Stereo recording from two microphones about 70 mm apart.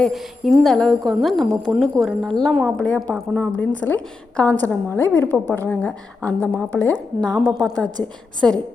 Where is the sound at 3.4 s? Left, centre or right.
Left.